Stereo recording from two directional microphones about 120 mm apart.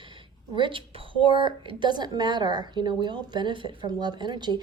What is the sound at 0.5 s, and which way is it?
A woman's voice, 45° right (ahead or behind).